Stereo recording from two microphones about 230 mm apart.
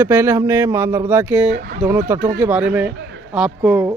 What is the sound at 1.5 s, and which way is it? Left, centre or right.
Speech, right.